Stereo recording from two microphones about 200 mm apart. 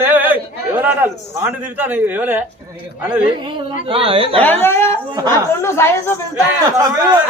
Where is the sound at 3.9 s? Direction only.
25° right (ahead or behind).